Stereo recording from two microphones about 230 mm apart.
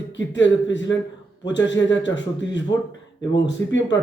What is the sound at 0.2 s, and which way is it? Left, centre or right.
A man's voice, left.